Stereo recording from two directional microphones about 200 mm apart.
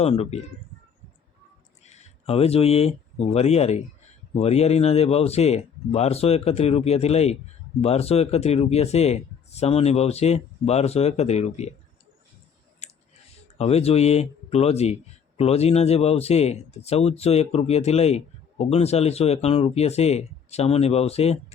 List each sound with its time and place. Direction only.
0.0 s speech: 30° left (ahead or behind)
1.8 s speech: 35° left (ahead or behind)
12.8 s clicking: 35° left (ahead or behind)
13.6 s speech: 30° left (ahead or behind)